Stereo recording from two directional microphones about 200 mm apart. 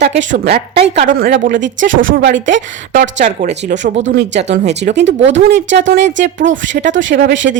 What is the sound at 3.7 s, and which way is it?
Speech, 65° right (ahead or behind).